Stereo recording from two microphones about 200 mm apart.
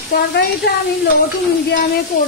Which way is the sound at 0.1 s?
50° left (ahead or behind).